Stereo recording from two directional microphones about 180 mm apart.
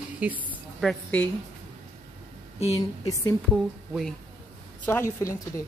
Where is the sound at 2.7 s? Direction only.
20° left (ahead or behind).